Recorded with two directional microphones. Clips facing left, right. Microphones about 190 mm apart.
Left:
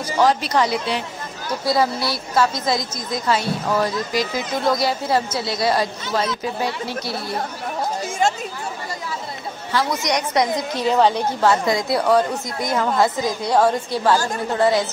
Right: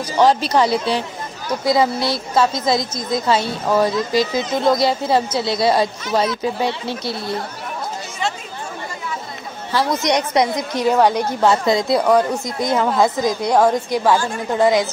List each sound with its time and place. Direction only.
0.2 s speech: 30° right (ahead or behind)
1.6 s a woman's voice: 20° right (ahead or behind)
9.8 s a woman's voice: 25° right (ahead or behind)
10.8 s a woman's voice: 10° right (ahead or behind)
12.7 s a woman's voice: 5° right (ahead or behind)
13.0 s a woman's voice: 15° right (ahead or behind)